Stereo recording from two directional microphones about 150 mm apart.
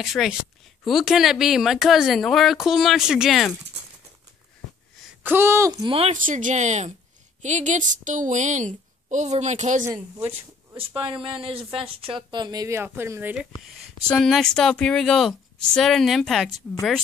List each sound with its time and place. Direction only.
0.0 s a woman's voice: centre (ahead or behind)
5.2 s speech: 15° right (ahead or behind)
6.1 s a woman's voice: 60° right (ahead or behind)
10.1 s speech: 20° right (ahead or behind)
11.4 s speech: 40° right (ahead or behind); by 13.5 s 10° right (ahead or behind)
13.7 s a woman's voice: 5° left (ahead or behind)